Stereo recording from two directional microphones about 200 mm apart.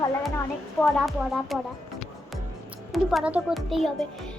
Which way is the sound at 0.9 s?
Centre (ahead or behind).